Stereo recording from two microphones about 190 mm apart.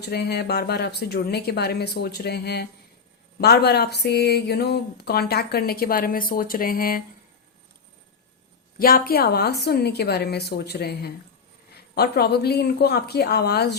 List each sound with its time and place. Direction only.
0.0 s speech: 55° left (ahead or behind)
8.8 s speech: 50° left (ahead or behind)